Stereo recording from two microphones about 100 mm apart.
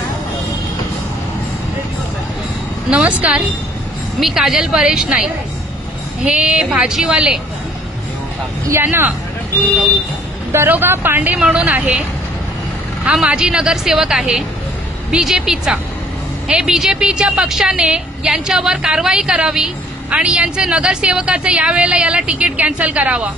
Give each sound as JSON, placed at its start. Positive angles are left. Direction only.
{"t": 2.9, "sound": "a woman's voice", "side_deg": -10}
{"t": 6.2, "sound": "a woman's voice", "side_deg": -10}
{"t": 8.6, "sound": "speech", "side_deg": -25}
{"t": 10.5, "sound": "a woman's voice", "side_deg": -20}
{"t": 13.0, "sound": "a woman's voice", "side_deg": -10}